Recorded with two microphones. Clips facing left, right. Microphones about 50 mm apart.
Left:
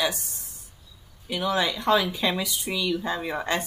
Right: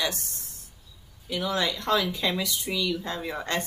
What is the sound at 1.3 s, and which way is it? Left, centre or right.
Speech, centre.